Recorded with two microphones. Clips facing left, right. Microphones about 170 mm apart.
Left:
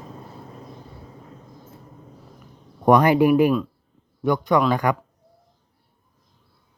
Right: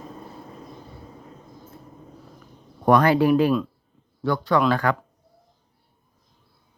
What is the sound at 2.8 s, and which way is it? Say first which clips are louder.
Speech: left 2 dB; 15° left (ahead or behind).